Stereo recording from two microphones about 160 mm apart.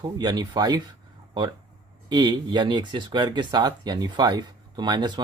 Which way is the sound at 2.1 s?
25° right (ahead or behind).